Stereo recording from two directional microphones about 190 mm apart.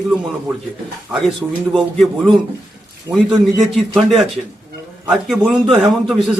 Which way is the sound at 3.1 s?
5° right (ahead or behind).